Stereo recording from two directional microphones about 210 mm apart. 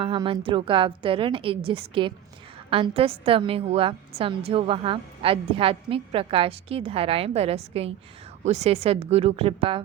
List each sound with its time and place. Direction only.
0.0 s a woman's voice: 25° right (ahead or behind)